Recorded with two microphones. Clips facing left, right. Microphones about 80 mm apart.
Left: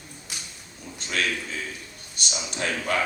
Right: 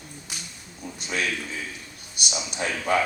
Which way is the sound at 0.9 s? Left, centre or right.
Centre.